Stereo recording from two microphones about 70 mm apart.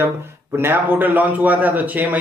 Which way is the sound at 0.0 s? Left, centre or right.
Right.